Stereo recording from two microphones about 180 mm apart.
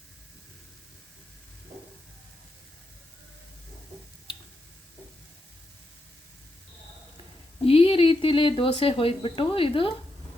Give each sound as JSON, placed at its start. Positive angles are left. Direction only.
{"t": 7.6, "sound": "speech", "side_deg": 30}